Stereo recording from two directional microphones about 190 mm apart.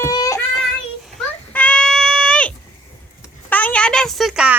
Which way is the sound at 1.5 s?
5° left (ahead or behind).